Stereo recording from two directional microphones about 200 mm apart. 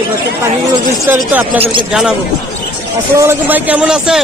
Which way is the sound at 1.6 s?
25° right (ahead or behind).